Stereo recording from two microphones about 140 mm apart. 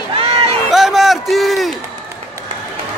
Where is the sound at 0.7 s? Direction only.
Centre (ahead or behind).